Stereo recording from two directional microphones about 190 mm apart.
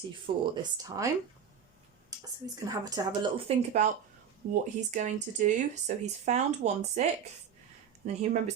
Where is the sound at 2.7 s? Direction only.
20° right (ahead or behind).